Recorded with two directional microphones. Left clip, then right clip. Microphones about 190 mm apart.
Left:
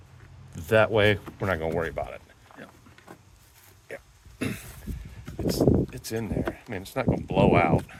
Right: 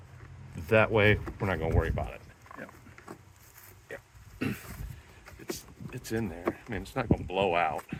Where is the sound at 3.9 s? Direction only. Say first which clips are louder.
Left 3 dB; 45° left (ahead or behind).